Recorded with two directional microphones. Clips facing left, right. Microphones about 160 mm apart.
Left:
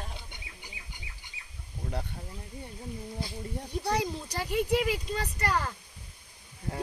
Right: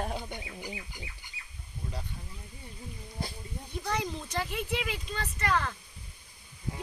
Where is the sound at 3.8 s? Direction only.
35° left (ahead or behind).